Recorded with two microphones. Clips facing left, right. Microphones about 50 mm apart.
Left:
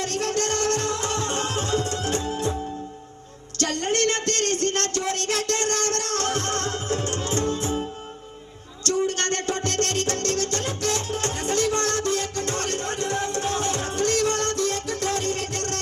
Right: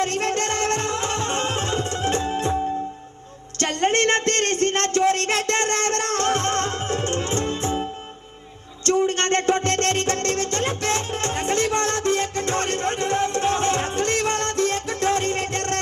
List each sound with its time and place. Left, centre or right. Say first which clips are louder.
0.0 s music: right 3 dB; right
3.6 s a sound: right 3 dB; right
8.8 s music: right 4 dB; right